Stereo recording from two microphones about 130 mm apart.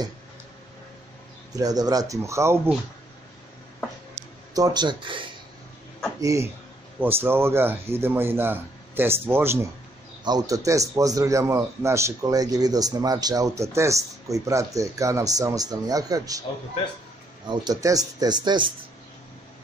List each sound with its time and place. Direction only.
1.5 s speech: 30° right (ahead or behind)
4.6 s speech: 30° right (ahead or behind)
6.2 s a man's voice: 25° right (ahead or behind)
10.2 s speech: 30° right (ahead or behind)
17.5 s speech: 30° right (ahead or behind)